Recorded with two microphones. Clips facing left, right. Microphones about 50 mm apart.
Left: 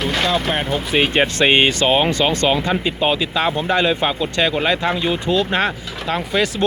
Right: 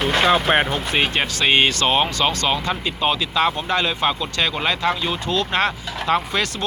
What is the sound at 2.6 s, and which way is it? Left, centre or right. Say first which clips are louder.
Speech: left 4 dB; centre.